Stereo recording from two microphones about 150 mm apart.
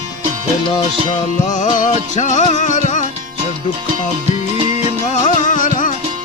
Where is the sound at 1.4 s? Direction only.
55° left (ahead or behind).